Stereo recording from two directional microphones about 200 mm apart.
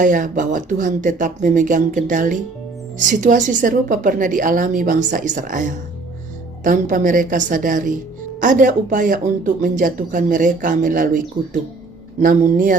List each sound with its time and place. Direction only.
0.0 s speech: 40° right (ahead or behind)